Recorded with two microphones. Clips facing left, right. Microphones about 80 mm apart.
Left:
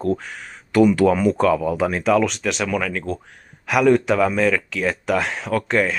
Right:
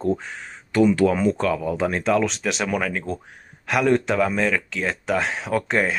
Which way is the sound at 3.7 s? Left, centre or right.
Centre.